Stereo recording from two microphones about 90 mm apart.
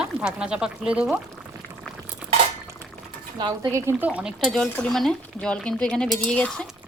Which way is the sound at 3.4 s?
50° right (ahead or behind).